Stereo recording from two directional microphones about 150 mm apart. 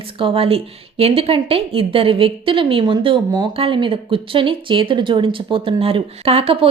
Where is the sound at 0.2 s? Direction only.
40° right (ahead or behind).